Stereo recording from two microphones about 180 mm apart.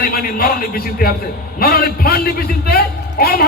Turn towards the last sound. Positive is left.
turn(degrees=55)  # may be behind; listen again after turning